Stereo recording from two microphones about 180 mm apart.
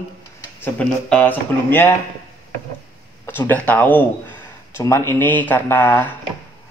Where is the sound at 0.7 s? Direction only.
10° left (ahead or behind).